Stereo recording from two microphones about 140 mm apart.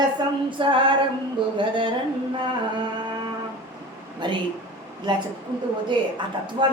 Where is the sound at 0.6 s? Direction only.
35° right (ahead or behind).